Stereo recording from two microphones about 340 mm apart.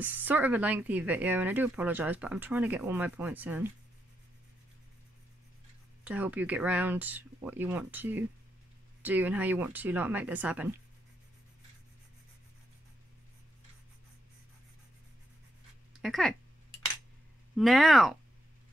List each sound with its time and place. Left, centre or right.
0.0 s speech: centre
6.0 s speech: centre
16.0 s speech: centre
17.6 s speech: centre